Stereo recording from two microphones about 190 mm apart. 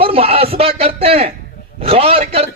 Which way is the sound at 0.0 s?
30° right (ahead or behind).